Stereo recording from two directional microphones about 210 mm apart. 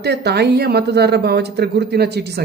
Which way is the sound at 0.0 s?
50° right (ahead or behind).